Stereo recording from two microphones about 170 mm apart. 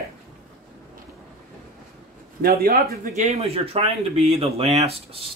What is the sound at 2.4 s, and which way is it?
Speech, 60° right (ahead or behind).